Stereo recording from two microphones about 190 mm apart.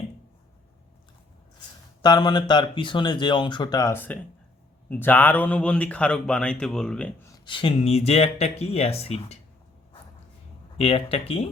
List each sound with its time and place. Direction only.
2.0 s speech: 20° left (ahead or behind); by 7.1 s 5° left (ahead or behind)
7.3 s speech: 25° left (ahead or behind)
10.8 s speech: 30° left (ahead or behind)